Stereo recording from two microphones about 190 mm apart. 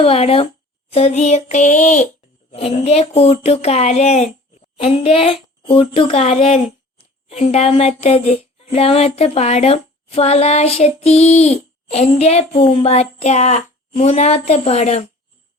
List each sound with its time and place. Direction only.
0.0 s speech: 30° left (ahead or behind)